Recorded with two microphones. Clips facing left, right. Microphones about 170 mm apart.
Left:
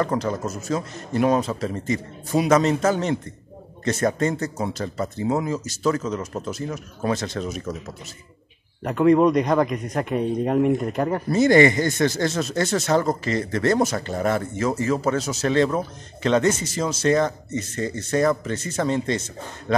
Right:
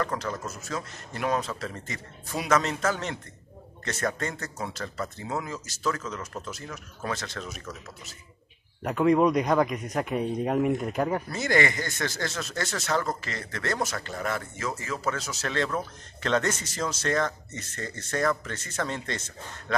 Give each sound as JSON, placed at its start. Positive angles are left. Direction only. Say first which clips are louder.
{"t": 0.0, "sound": "speech", "louder": "left 7 dB", "side_deg": 20}
{"t": 8.8, "sound": "a man's voice", "louder": "left 5 dB", "side_deg": 0}
{"t": 11.3, "sound": "a man's voice", "louder": "left 12 dB", "side_deg": 20}